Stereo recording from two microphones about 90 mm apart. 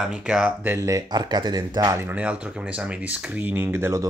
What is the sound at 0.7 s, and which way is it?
Speech, 40° right (ahead or behind).